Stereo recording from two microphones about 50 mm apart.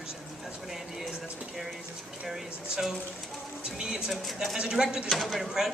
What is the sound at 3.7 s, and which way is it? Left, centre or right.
A man's voice, centre.